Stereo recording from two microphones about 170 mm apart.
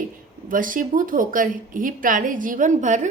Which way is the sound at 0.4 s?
55° right (ahead or behind).